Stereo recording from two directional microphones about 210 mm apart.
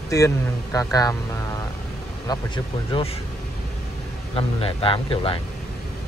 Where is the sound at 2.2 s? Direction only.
20° left (ahead or behind).